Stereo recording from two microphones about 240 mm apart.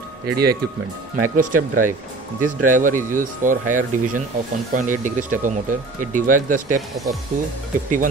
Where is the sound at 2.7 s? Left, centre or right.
Right.